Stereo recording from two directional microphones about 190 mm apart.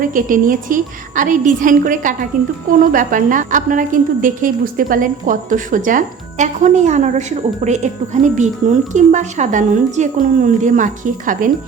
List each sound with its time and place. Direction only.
0.0 s a woman's voice: 45° right (ahead or behind)